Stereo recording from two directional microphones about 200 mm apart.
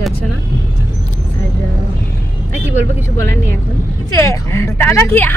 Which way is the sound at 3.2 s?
15° left (ahead or behind).